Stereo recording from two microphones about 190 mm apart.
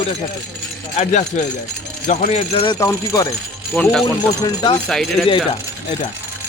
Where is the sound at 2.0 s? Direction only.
45° left (ahead or behind).